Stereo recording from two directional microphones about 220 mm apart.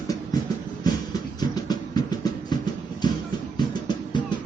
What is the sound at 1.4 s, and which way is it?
Music, 20° left (ahead or behind).